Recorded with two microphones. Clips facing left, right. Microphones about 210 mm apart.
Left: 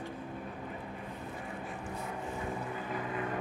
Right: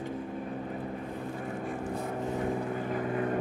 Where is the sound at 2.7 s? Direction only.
45° right (ahead or behind).